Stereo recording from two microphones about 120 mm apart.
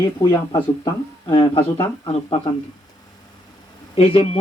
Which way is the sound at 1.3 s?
45° left (ahead or behind).